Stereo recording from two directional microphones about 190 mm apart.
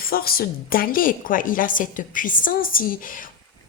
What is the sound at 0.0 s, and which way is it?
A woman's voice, 50° left (ahead or behind).